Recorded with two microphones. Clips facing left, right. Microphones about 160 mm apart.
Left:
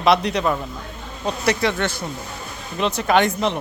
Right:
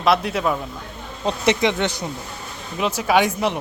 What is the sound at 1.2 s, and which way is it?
Speech, 20° right (ahead or behind).